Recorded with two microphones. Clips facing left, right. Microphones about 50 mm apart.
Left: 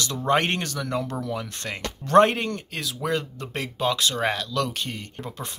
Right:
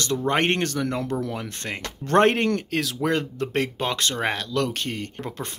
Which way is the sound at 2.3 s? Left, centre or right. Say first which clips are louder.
Right 6 dB; right.